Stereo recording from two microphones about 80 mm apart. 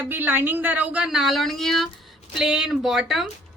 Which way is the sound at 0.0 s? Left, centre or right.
Right.